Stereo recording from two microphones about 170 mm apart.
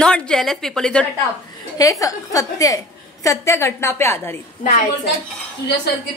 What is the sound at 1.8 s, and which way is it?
A woman's voice, 20° left (ahead or behind).